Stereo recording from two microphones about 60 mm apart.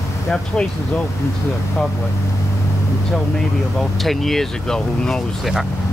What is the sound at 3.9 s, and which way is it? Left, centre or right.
Speech, centre.